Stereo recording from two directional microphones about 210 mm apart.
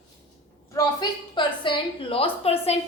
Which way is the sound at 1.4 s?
20° left (ahead or behind).